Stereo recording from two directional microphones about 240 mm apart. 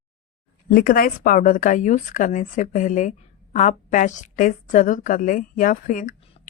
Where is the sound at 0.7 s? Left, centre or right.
Left.